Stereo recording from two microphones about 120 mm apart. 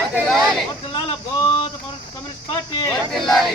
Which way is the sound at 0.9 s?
40° left (ahead or behind).